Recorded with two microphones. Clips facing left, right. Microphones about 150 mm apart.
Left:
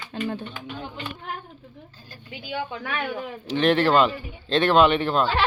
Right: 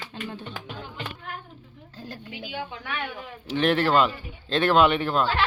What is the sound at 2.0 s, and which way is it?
Speech, 70° right (ahead or behind).